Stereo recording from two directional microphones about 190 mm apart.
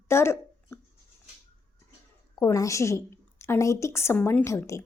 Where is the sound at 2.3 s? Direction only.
15° left (ahead or behind).